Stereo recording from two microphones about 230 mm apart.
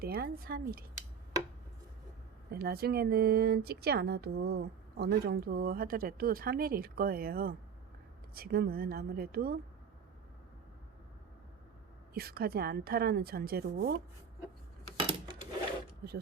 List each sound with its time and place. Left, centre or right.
0.0 s a woman's voice: right
2.5 s a woman's voice: right
12.1 s a woman's voice: right
14.9 s a sound: right